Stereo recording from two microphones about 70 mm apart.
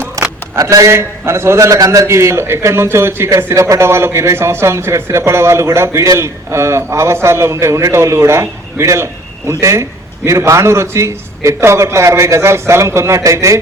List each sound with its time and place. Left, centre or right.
0.2 s a sound: right
0.6 s a man's voice: right
2.0 s a man's voice: right
3.2 s a man's voice: right